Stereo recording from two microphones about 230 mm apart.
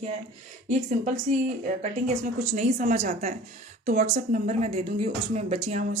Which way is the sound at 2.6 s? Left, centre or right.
Right.